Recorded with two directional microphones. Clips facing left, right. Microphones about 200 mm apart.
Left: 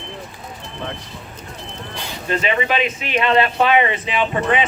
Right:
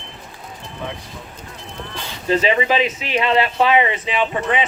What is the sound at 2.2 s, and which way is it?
Speech, 30° right (ahead or behind).